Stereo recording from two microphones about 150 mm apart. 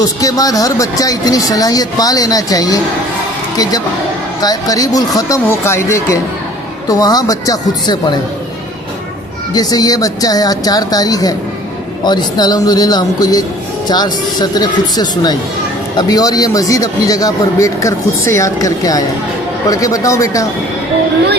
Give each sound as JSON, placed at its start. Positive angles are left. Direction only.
{"t": 0.0, "sound": "speech", "side_deg": 25}
{"t": 4.4, "sound": "speech", "side_deg": 25}
{"t": 9.5, "sound": "speech", "side_deg": 25}